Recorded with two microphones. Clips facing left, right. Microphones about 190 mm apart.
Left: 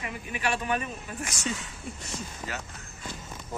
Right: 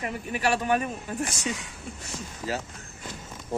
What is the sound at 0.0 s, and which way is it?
Speech, 45° right (ahead or behind).